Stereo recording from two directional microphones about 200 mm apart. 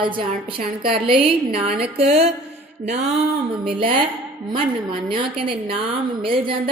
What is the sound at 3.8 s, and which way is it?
A woman's voice, 25° right (ahead or behind).